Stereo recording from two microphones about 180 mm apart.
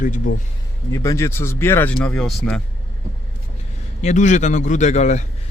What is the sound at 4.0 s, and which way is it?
Speech, 40° left (ahead or behind).